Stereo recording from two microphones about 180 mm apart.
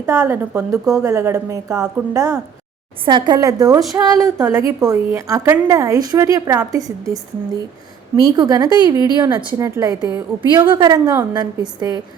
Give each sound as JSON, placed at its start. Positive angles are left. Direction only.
{"t": 0.0, "sound": "a woman's voice", "side_deg": -15}
{"t": 8.1, "sound": "a woman's voice", "side_deg": -25}